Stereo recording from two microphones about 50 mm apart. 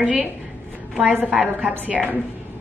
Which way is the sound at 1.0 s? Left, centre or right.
Right.